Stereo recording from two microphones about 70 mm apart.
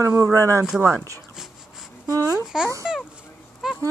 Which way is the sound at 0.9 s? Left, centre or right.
Right.